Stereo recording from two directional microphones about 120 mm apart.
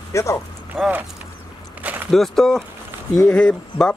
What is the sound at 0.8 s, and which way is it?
Speech, 10° right (ahead or behind).